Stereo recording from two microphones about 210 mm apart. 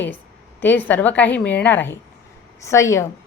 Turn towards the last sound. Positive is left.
turn(degrees=15)  # may be behind; listen again after turning